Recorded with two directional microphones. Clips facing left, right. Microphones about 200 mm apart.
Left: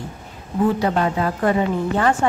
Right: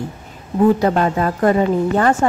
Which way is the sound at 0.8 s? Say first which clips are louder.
Right 3 dB; 45° right (ahead or behind).